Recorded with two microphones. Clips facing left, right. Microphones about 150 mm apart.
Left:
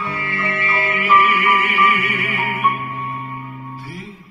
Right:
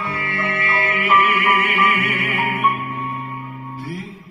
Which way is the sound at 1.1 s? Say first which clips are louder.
Left 2 dB; 60° right (ahead or behind).